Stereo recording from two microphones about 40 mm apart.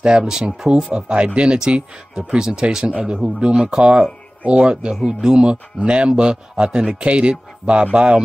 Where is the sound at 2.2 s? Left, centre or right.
Centre.